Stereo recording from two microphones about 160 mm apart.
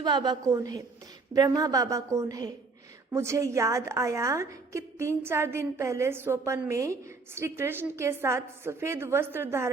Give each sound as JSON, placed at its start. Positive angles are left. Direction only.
{"t": 0.0, "sound": "a woman's voice", "side_deg": -25}